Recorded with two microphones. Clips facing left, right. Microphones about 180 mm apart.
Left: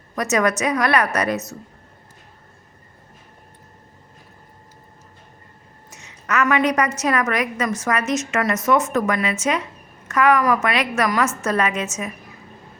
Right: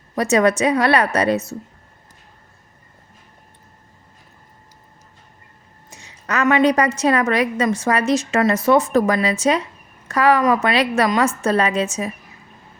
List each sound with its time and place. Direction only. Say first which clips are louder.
0.2 s a woman's voice: right 4 dB; 30° right (ahead or behind)
5.9 s a woman's voice: even; 30° right (ahead or behind)